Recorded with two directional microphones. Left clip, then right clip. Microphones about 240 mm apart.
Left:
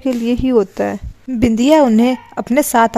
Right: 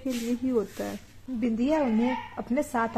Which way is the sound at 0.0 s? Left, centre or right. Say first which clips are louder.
Left 13 dB; left.